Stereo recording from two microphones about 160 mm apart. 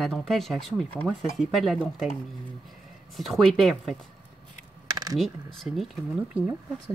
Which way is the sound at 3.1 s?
Centre (ahead or behind).